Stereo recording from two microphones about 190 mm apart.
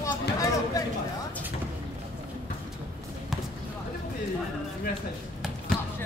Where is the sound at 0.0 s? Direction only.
15° left (ahead or behind).